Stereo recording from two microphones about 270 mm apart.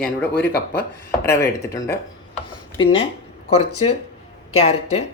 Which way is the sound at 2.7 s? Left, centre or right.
Left.